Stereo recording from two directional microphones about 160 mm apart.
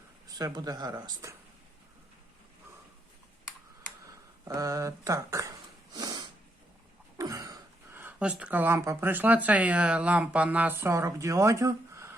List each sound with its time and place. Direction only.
0.3 s speech: 25° right (ahead or behind)
4.4 s sniff: 20° right (ahead or behind)
7.2 s speech: 20° right (ahead or behind)